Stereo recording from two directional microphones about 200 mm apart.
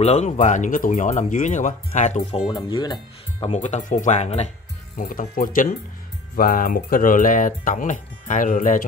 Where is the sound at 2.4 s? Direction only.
20° left (ahead or behind).